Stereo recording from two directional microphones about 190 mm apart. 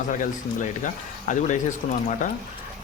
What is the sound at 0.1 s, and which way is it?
Speech, 45° left (ahead or behind).